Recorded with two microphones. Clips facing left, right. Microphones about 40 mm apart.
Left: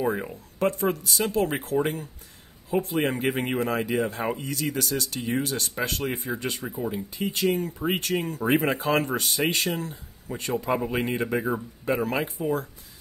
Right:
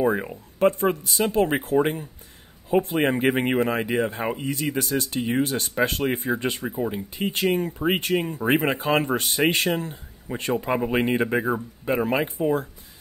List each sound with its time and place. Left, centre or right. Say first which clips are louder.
0.0 s speech: right 4 dB; centre
0.6 s speech: right 4 dB; right
6.6 s speech: right 3 dB; centre
8.5 s speech: right 1 dB; right
11.4 s speech: right 2 dB; centre